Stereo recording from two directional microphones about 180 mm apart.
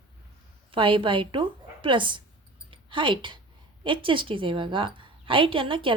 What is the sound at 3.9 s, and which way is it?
A woman's voice, 30° right (ahead or behind).